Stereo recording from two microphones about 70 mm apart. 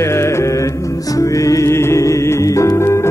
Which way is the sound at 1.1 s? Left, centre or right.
Left.